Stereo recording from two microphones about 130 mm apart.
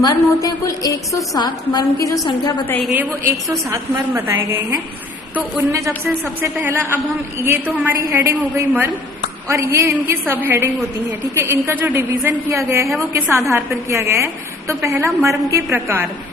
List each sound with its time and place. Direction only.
0.0 s a woman's voice: 30° left (ahead or behind)
2.9 s a woman's voice: 15° right (ahead or behind)
6.7 s a man's voice: 15° right (ahead or behind)